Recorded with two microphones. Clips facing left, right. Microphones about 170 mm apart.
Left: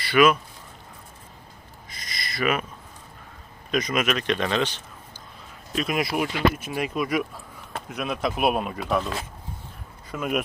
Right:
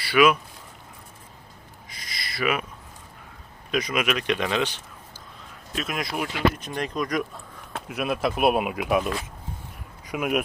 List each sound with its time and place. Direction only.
0.0 s speech: 10° right (ahead or behind)
1.9 s a sound: 5° right (ahead or behind)
3.7 s a man's voice: 10° right (ahead or behind)
5.7 s speech: centre (ahead or behind)
7.7 s speech: 5° right (ahead or behind)
10.1 s speech: 10° right (ahead or behind)